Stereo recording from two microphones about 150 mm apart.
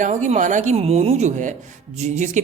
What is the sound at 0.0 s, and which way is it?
A woman's voice, 55° right (ahead or behind).